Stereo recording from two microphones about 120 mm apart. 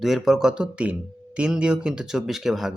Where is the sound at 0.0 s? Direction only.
Centre (ahead or behind).